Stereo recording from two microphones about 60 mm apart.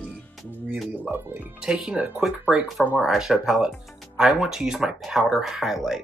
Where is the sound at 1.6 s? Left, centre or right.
Centre.